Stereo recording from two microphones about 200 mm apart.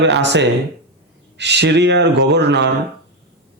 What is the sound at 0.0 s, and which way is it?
A man's voice, 60° right (ahead or behind).